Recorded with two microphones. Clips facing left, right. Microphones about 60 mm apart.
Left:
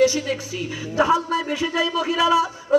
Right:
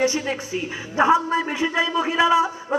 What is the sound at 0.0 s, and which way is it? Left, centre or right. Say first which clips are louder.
A woman's voice: left 3 dB; right.